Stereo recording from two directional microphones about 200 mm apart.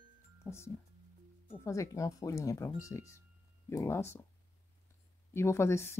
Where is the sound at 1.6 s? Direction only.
15° left (ahead or behind).